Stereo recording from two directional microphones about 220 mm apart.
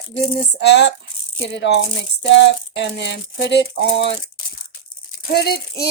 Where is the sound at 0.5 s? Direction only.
50° left (ahead or behind).